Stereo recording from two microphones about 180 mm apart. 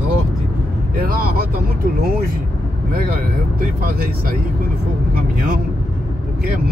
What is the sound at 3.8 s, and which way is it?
Speech, 55° right (ahead or behind).